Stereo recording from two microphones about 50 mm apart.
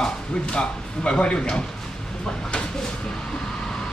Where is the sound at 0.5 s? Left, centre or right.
Centre.